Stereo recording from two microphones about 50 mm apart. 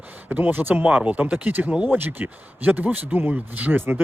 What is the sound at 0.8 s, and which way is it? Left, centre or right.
Speech, right.